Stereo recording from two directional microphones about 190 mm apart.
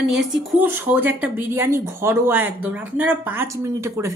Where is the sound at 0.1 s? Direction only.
5° right (ahead or behind).